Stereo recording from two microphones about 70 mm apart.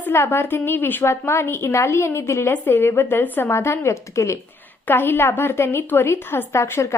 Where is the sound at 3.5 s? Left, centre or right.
Left.